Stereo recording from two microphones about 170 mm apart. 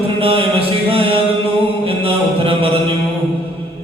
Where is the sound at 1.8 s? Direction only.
35° right (ahead or behind).